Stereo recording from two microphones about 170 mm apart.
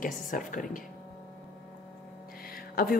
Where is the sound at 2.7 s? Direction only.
60° left (ahead or behind).